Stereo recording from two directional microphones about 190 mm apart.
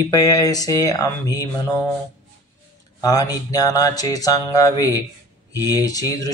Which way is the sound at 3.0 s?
20° left (ahead or behind).